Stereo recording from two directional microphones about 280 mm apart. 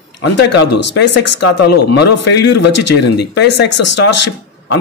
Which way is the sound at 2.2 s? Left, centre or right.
Left.